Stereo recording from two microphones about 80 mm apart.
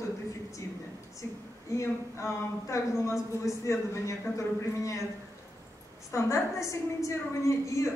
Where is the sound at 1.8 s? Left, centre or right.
Left.